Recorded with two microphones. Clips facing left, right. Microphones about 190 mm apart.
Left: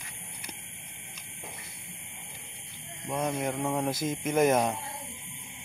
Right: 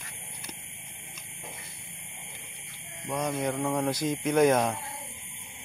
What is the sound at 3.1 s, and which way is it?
Speech, 5° left (ahead or behind).